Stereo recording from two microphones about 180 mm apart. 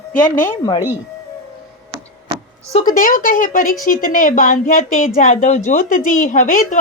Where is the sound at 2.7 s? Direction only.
50° left (ahead or behind).